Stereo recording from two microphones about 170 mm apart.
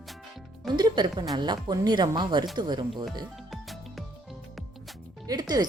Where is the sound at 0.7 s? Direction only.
25° right (ahead or behind).